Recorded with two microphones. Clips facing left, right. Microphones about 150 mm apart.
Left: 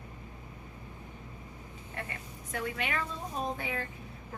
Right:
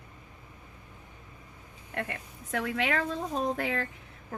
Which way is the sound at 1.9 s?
70° right (ahead or behind).